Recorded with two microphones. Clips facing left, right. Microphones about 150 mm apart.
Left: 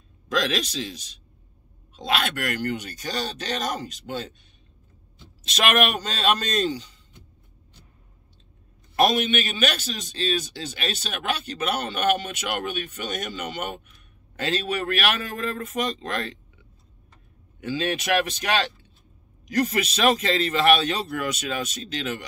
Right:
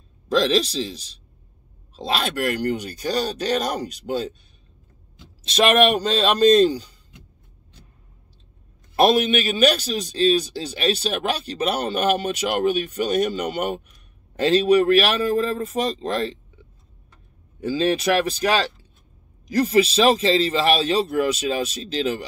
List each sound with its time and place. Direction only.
0.3 s a man's voice: 30° right (ahead or behind)
5.6 s a man's voice: 30° right (ahead or behind)
8.9 s a man's voice: 35° right (ahead or behind)
17.6 s a man's voice: 35° right (ahead or behind)